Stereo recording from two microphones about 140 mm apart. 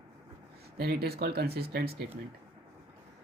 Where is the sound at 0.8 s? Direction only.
90° right.